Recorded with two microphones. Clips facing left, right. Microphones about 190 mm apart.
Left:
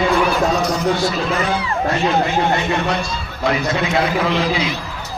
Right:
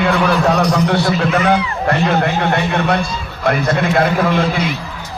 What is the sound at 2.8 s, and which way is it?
A man's voice, 55° right (ahead or behind).